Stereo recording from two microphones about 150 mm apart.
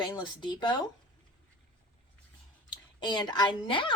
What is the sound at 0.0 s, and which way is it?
Speech, 30° left (ahead or behind).